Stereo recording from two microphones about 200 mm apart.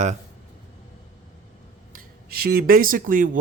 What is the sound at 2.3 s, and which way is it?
Speech, 50° right (ahead or behind).